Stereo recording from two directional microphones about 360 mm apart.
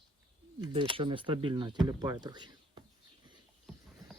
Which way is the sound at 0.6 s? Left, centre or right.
Centre.